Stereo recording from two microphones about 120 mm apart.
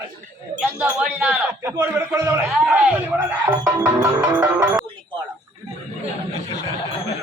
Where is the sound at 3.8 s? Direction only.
10° right (ahead or behind).